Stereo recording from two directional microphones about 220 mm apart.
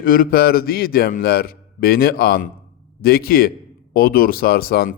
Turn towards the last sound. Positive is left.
turn(degrees=45)  # may be behind; listen again after turning